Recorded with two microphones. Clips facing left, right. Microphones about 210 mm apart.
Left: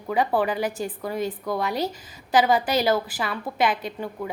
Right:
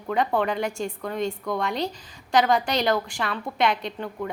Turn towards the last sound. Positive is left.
turn(degrees=5)  # may be behind; listen again after turning